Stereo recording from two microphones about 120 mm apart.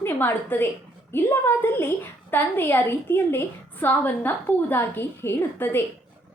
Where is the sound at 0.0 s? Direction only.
15° left (ahead or behind).